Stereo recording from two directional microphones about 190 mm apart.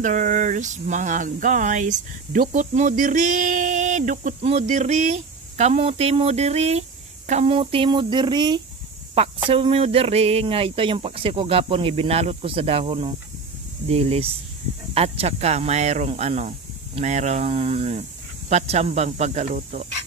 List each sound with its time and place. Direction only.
0.0 s speech: 40° right (ahead or behind)